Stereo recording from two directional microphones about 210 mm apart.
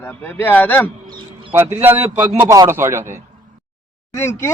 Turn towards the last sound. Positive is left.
turn(degrees=10)  # may be behind; listen again after turning